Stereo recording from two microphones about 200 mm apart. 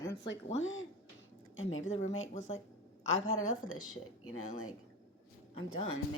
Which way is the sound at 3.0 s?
80° left.